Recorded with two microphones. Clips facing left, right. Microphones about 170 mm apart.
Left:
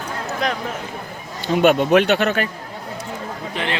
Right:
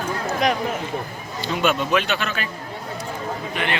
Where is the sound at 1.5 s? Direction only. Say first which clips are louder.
Left 7 dB; 55° left (ahead or behind).